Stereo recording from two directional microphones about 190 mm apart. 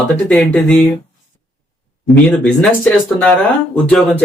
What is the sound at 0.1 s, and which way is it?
Speech, 5° left (ahead or behind).